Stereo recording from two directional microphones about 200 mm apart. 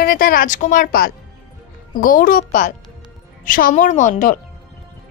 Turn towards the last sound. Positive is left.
turn(degrees=40)  # may be behind; listen again after turning